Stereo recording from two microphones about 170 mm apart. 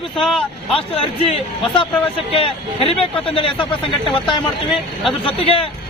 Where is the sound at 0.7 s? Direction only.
35° left (ahead or behind).